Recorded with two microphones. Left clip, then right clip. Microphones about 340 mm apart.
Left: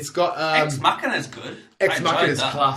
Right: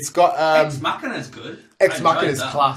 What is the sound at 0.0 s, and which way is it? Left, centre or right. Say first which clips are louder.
Speech: right 6 dB; centre.